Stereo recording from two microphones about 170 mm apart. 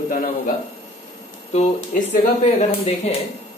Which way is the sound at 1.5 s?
45° left (ahead or behind).